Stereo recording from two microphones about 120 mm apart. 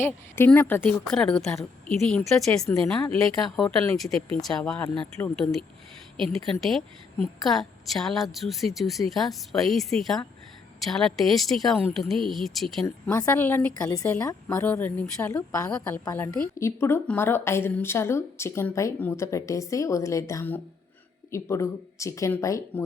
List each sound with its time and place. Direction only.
0.3 s a woman's voice: 20° left (ahead or behind)
1.1 s a woman's voice: 5° left (ahead or behind)
12.8 s a woman's voice: 25° left (ahead or behind)
13.9 s a woman's voice: 25° left (ahead or behind)